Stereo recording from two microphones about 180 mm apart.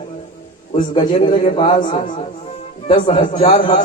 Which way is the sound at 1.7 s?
45° left (ahead or behind).